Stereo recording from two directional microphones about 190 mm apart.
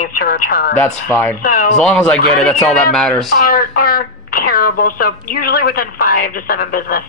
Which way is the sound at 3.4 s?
50° left (ahead or behind).